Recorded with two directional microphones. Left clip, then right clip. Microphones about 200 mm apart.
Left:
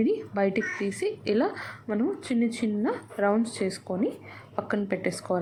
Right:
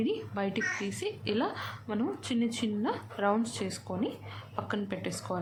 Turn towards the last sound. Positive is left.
turn(degrees=20)  # may be behind; listen again after turning